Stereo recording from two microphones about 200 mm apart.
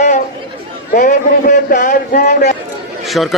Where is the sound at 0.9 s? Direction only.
40° left (ahead or behind).